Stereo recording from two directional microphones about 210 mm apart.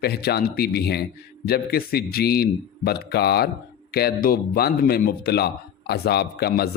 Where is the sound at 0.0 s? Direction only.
50° left (ahead or behind).